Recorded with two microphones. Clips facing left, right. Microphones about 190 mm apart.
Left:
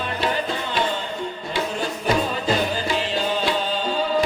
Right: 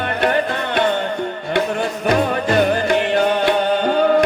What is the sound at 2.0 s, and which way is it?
Music, 60° right (ahead or behind).